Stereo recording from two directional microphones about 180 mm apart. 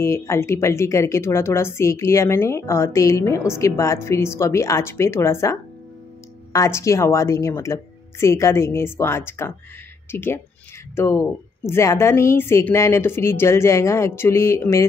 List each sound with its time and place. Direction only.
0.0 s a woman's voice: 15° left (ahead or behind)